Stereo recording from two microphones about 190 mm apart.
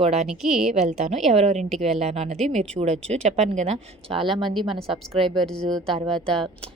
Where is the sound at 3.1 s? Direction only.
35° right (ahead or behind).